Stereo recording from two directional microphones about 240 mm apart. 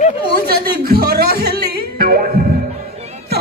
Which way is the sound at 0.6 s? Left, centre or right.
Right.